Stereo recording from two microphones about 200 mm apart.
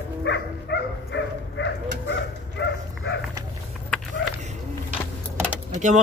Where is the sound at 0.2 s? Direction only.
60° left (ahead or behind).